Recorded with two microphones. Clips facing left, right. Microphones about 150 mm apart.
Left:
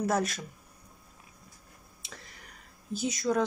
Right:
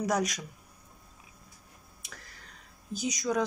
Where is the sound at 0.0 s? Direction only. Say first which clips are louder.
Left 1 dB; 5° left (ahead or behind).